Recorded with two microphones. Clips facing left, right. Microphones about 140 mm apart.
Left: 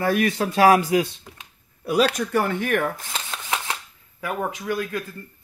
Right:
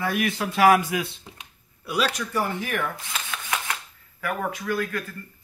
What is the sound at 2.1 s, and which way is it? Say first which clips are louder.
Speech: left 4 dB; 60° left (ahead or behind).